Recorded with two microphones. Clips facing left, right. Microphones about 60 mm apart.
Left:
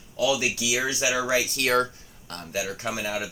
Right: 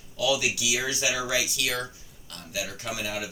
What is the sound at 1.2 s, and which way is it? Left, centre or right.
Speech, left.